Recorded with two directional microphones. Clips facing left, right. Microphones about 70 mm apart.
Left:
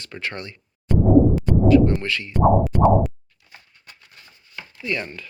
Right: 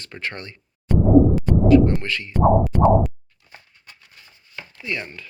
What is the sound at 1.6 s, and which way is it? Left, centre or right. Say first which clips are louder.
Speech: right 1 dB; right.